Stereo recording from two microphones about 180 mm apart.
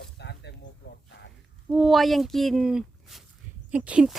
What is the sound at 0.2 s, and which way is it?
Snake, 70° left (ahead or behind).